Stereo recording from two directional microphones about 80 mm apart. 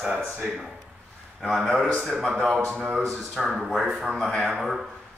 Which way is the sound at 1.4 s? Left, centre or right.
Centre.